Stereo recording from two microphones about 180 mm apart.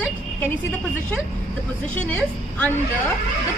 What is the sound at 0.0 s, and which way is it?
A woman's voice, 10° left (ahead or behind).